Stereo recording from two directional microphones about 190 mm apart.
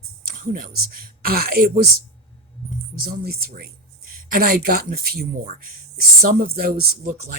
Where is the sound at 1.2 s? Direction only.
50° right (ahead or behind).